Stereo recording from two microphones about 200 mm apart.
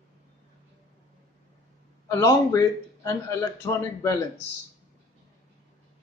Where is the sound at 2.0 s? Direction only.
15° left (ahead or behind).